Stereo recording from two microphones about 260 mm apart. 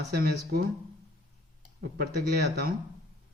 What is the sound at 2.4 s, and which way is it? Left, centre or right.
Speech, right.